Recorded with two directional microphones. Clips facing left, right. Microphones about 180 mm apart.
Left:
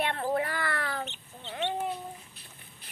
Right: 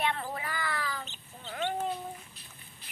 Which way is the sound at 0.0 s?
60° left (ahead or behind).